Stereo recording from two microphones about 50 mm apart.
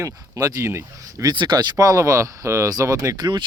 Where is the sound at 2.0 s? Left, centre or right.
Right.